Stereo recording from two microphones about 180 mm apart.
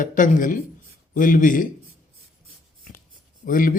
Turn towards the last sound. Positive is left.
turn(degrees=50)  # may be behind; listen again after turning